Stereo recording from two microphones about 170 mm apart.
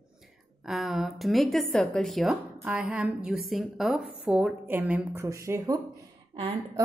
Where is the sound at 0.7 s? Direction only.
Centre (ahead or behind); by 5.8 s 20° right (ahead or behind).